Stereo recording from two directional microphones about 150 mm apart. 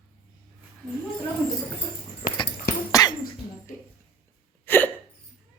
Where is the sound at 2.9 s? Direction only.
25° left (ahead or behind).